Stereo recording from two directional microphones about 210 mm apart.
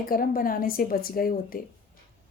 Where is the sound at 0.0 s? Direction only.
45° left (ahead or behind).